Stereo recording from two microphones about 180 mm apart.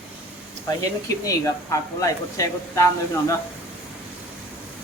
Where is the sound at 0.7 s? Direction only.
20° left (ahead or behind).